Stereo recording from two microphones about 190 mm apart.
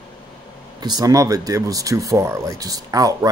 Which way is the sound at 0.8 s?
20° right (ahead or behind).